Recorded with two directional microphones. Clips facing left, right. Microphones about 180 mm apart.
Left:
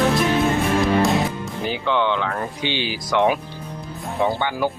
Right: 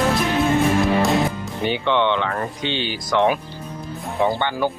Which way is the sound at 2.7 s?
10° left (ahead or behind).